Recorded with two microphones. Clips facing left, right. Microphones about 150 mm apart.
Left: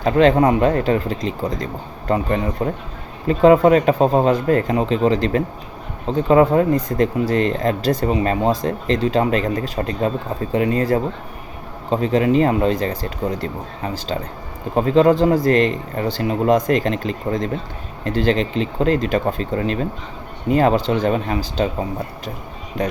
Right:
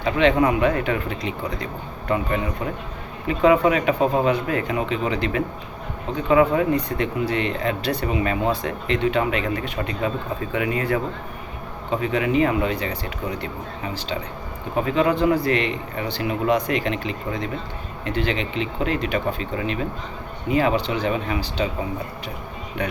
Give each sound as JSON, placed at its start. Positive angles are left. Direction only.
{"t": 0.0, "sound": "speech", "side_deg": 40}